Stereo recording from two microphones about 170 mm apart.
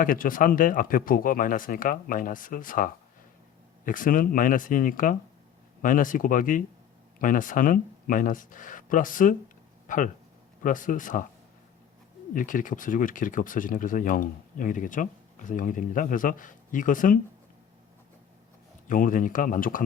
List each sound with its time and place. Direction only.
0.0 s speech: 55° left (ahead or behind)
9.8 s a sound: 50° left (ahead or behind)
10.6 s speech: 50° left (ahead or behind)
12.3 s speech: 50° left (ahead or behind)
18.9 s speech: 50° left (ahead or behind)